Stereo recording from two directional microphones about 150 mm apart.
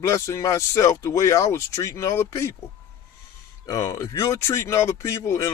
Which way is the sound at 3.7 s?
25° left (ahead or behind).